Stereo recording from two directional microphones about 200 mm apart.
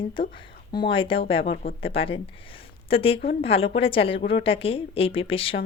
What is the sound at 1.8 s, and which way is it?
Speech, 25° left (ahead or behind).